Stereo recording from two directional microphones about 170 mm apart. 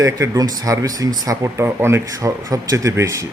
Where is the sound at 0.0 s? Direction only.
20° right (ahead or behind).